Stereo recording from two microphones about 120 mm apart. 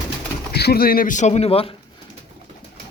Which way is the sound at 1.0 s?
80° left.